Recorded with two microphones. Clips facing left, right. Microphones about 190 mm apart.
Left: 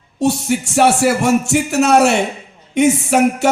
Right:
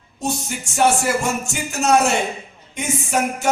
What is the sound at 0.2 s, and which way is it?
Music, 70° left (ahead or behind).